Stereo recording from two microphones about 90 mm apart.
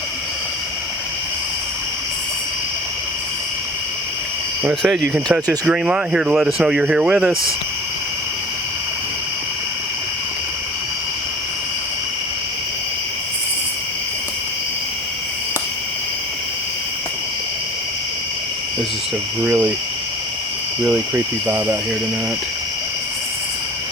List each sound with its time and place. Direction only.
4.7 s speech: 5° right (ahead or behind)
19.4 s speech: 20° right (ahead or behind)
20.8 s speech: 20° right (ahead or behind)